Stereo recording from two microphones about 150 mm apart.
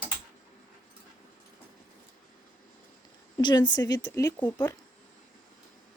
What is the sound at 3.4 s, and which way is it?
Speech, 30° left (ahead or behind).